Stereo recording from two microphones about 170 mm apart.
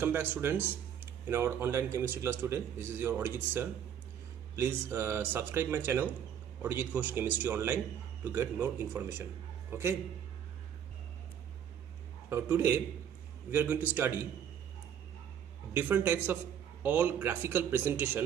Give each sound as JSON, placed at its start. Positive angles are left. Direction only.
{"t": 0.0, "sound": "a man's voice", "side_deg": -10}
{"t": 12.3, "sound": "a man's voice", "side_deg": -15}
{"t": 15.7, "sound": "a man's voice", "side_deg": -10}